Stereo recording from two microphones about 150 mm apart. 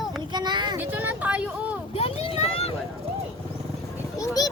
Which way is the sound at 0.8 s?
10° right (ahead or behind).